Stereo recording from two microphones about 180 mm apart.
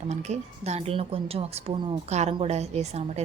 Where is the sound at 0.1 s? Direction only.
40° right (ahead or behind).